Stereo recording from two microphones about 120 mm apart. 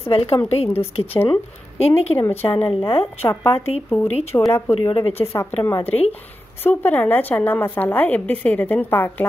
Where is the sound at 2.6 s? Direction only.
50° left (ahead or behind).